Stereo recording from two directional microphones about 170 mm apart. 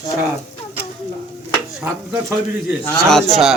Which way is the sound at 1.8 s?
10° right (ahead or behind).